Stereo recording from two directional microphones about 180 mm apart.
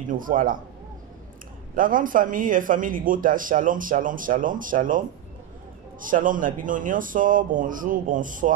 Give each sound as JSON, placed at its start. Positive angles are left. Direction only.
{"t": 0.1, "sound": "speech", "side_deg": -50}
{"t": 1.8, "sound": "speech", "side_deg": -50}